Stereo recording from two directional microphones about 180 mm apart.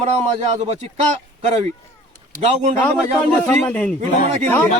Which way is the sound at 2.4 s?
40° right (ahead or behind).